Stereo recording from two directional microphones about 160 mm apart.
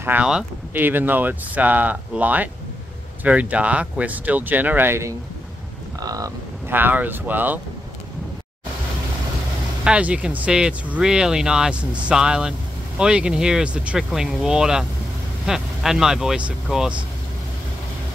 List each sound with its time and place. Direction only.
0.0 s speech: 10° right (ahead or behind)
9.8 s speech: 10° right (ahead or behind)